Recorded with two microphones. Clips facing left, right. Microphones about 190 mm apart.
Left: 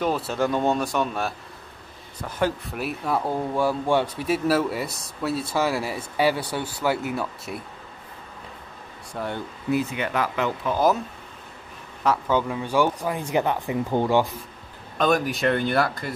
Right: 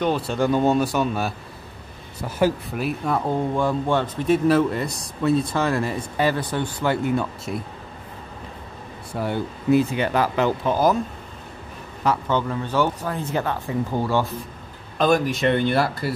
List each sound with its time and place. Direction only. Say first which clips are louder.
0.0 s speech: right 2 dB; centre (ahead or behind)
9.1 s speech: right 4 dB; 5° right (ahead or behind)
9.7 s speech: right 6 dB; 30° right (ahead or behind)
12.0 s speech: even; 5° left (ahead or behind)
15.0 s speech: right 2 dB; centre (ahead or behind)